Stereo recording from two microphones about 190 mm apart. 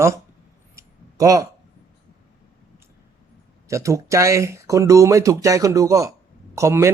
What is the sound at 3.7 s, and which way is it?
Speech, 15° right (ahead or behind).